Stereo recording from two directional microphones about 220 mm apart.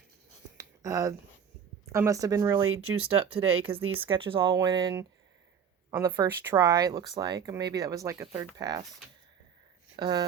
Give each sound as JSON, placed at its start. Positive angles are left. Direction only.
{"t": 0.5, "sound": "a sound", "side_deg": -15}
{"t": 1.9, "sound": "speech", "side_deg": -15}
{"t": 2.6, "sound": "speech", "side_deg": -75}
{"t": 3.1, "sound": "speech", "side_deg": -25}
{"t": 9.9, "sound": "speech", "side_deg": -20}